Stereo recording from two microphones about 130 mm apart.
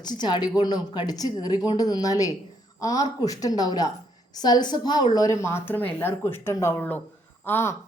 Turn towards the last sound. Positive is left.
turn(degrees=15)  # may be behind; listen again after turning